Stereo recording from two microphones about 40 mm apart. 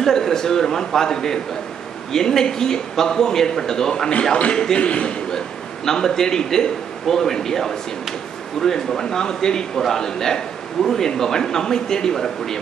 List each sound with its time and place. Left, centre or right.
0.0 s a man's voice: centre
4.7 s a man's voice: left
5.9 s a man's voice: centre